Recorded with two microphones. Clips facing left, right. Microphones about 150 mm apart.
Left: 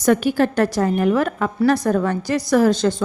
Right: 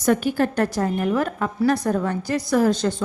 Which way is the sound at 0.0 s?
85° left.